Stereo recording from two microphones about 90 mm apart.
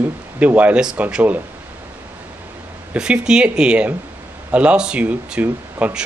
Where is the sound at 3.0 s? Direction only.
10° right (ahead or behind).